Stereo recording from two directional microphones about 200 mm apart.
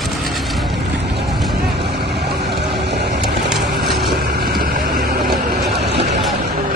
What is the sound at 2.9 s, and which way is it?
Vehicle, 55° right (ahead or behind).